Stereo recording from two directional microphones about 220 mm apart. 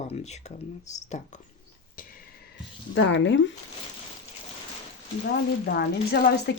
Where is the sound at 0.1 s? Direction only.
30° left (ahead or behind).